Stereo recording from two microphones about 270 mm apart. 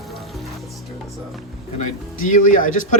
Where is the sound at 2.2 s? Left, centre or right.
Left.